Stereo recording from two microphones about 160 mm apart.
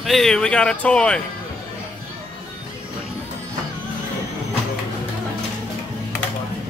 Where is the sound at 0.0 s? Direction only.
Centre (ahead or behind).